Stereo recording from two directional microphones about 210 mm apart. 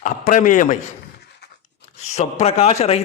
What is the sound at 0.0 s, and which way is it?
Speech, 40° left (ahead or behind).